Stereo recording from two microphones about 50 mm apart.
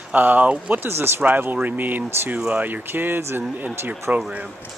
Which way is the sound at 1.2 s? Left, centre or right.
Right.